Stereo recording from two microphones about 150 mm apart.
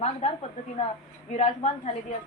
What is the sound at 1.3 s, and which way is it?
Speech, 50° left (ahead or behind).